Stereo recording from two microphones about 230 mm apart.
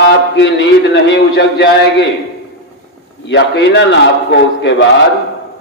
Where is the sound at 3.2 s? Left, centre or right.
Left.